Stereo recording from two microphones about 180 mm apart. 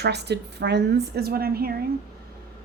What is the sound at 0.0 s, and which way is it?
A woman's voice, 65° right (ahead or behind).